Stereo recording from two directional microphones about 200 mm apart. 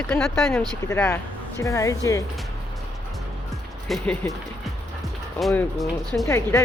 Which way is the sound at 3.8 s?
5° left (ahead or behind).